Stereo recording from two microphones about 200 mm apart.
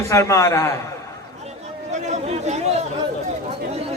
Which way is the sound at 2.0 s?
30° right (ahead or behind).